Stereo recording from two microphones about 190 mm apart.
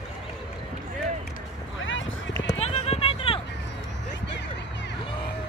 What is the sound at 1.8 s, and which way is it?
Run, 90° left.